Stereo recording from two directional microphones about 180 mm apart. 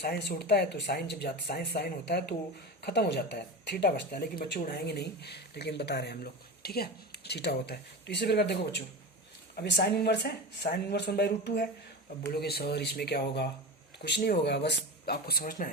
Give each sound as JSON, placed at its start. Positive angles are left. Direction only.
{"t": 0.0, "sound": "speech", "side_deg": 65}